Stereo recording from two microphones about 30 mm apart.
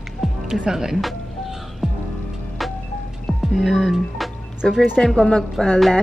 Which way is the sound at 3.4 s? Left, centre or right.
Centre.